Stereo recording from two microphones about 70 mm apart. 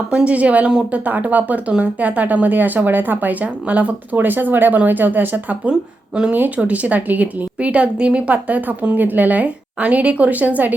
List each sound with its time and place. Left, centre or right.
0.3 s a woman's voice: centre